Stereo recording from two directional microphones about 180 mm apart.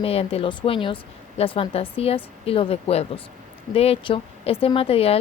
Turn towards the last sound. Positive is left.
turn(degrees=35)  # may be behind; listen again after turning